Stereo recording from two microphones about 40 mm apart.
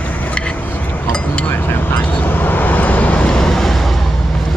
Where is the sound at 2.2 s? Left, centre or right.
Left.